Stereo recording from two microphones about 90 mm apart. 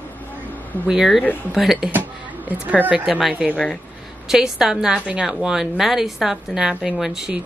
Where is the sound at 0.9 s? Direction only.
5° right (ahead or behind).